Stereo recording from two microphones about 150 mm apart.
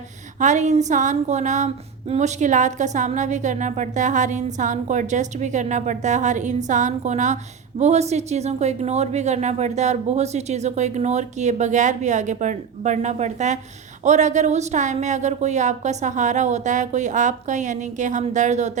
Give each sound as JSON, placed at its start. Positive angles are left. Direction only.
{"t": 0.3, "sound": "speech", "side_deg": -55}